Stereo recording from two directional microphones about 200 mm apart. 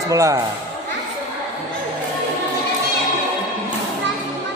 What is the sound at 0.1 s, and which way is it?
Speech, 15° right (ahead or behind).